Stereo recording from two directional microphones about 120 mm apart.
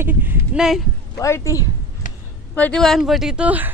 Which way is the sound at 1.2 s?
25° left (ahead or behind).